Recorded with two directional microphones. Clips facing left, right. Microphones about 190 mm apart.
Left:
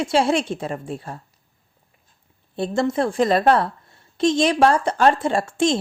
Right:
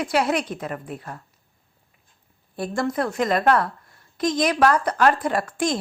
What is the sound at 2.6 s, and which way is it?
A woman's voice, 25° left (ahead or behind).